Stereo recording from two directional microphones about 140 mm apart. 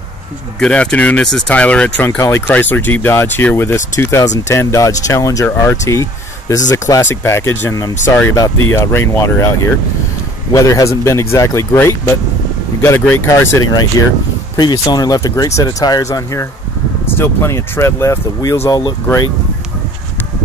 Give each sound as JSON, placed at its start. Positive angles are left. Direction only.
{"t": 0.6, "sound": "speech", "side_deg": 5}
{"t": 10.5, "sound": "speech", "side_deg": 20}